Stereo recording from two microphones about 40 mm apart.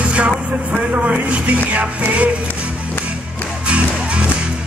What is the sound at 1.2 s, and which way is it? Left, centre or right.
Music, right.